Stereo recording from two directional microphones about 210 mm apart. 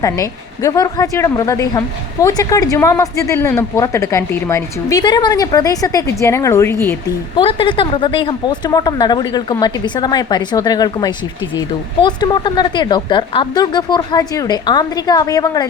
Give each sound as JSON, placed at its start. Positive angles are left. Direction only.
{"t": 0.0, "sound": "a woman's voice", "side_deg": 15}
{"t": 7.3, "sound": "speech", "side_deg": 25}